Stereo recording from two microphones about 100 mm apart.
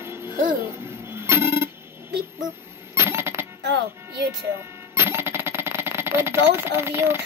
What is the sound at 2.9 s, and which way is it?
Coin, 25° right (ahead or behind).